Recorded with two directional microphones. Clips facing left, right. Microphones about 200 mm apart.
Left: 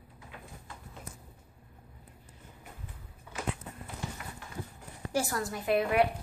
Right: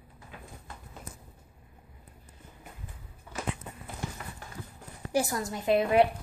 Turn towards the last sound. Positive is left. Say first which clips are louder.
# right 3 dB
turn(degrees=-25)  # may be behind; listen again after turning